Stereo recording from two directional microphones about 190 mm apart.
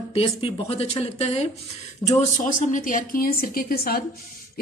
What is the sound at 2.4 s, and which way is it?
Speech, 45° left (ahead or behind).